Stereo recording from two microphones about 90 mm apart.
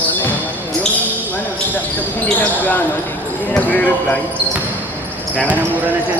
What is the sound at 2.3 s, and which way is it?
Speech, 20° left (ahead or behind).